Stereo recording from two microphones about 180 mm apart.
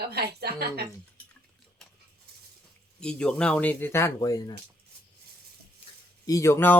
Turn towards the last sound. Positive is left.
turn(degrees=15)  # may be behind; listen again after turning